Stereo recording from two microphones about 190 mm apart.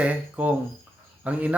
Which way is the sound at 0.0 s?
5° right (ahead or behind).